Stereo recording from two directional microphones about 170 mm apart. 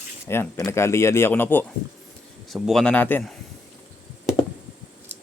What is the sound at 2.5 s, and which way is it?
Speech, centre (ahead or behind).